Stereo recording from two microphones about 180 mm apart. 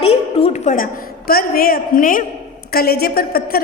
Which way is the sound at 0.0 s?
35° left (ahead or behind).